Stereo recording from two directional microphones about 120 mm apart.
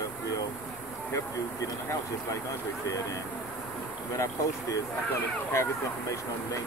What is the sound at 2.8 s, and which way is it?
Speech, 30° left (ahead or behind).